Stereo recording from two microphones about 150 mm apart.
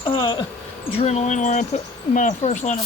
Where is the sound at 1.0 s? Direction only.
50° left (ahead or behind).